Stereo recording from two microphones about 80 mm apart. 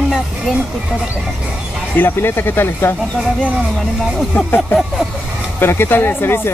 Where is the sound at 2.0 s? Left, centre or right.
Left.